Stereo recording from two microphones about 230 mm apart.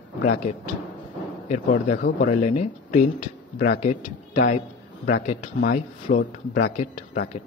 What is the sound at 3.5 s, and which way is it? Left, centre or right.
Speech, left.